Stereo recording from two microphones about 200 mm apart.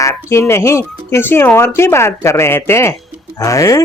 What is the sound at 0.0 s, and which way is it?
Speech, 15° left (ahead or behind).